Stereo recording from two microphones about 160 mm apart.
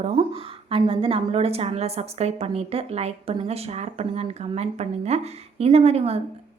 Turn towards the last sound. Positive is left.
turn(degrees=-40)  # may be behind; listen again after turning